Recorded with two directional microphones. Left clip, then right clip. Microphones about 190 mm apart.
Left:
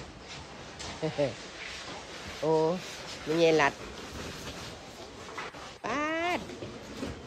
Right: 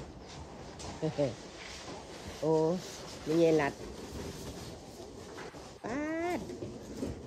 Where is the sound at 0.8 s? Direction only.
30° right (ahead or behind).